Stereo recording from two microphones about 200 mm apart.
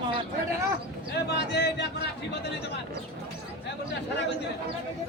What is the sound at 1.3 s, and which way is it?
Speech, 60° left (ahead or behind).